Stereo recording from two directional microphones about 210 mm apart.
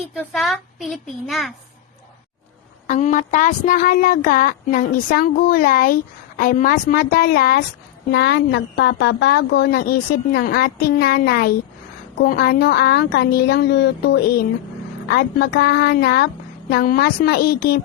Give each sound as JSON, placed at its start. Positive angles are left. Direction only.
{"t": 0.2, "sound": "a child's voice", "side_deg": 0}
{"t": 2.8, "sound": "speech", "side_deg": 40}